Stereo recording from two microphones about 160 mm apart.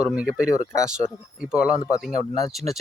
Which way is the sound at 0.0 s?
5° right (ahead or behind).